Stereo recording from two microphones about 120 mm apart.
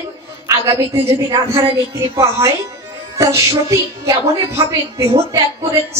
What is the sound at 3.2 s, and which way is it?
A woman's voice, 25° right (ahead or behind).